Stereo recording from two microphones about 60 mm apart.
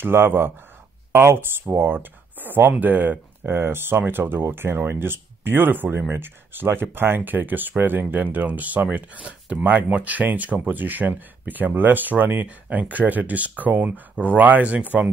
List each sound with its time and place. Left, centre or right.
0.0 s speech: right
2.0 s speech: right